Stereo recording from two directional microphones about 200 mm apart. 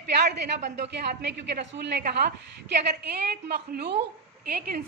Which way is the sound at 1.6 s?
55° right (ahead or behind).